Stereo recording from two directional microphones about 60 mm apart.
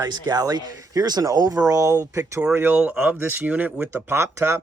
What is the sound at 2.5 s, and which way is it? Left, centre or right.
Speech, right.